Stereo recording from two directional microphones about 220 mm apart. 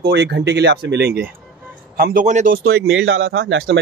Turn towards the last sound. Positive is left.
turn(degrees=-60)  # may be behind; listen again after turning